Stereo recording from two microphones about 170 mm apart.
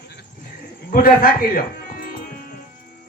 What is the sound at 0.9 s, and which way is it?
Music, 60° left (ahead or behind).